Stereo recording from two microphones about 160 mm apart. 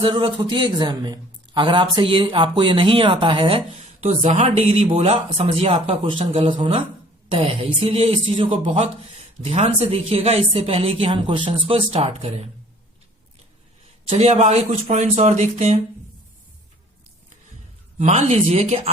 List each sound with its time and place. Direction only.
0.0 s a man's voice: 30° right (ahead or behind)
14.1 s a man's voice: 40° right (ahead or behind)
17.9 s a man's voice: 45° right (ahead or behind)